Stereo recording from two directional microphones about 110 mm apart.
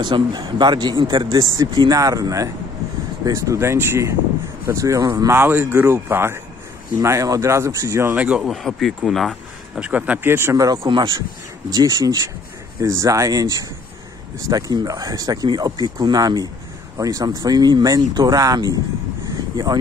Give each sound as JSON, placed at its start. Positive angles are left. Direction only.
{"t": 0.0, "sound": "speech", "side_deg": -40}
{"t": 5.4, "sound": "speech", "side_deg": -20}
{"t": 8.2, "sound": "speech", "side_deg": -10}
{"t": 8.5, "sound": "speech", "side_deg": 0}
{"t": 9.8, "sound": "speech", "side_deg": -10}